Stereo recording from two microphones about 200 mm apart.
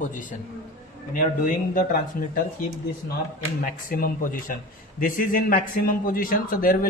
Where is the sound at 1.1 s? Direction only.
40° left (ahead or behind).